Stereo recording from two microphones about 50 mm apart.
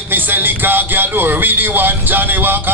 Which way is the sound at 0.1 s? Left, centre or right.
Right.